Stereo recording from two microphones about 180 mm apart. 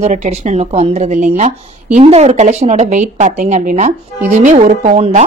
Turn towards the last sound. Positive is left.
turn(degrees=-40)  # may be behind; listen again after turning